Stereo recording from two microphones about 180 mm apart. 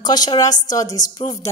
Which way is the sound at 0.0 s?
20° left (ahead or behind).